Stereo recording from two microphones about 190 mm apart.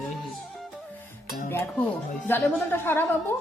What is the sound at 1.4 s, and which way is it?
Speech, 10° left (ahead or behind).